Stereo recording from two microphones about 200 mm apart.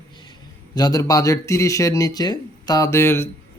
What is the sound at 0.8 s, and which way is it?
Speech, 20° left (ahead or behind).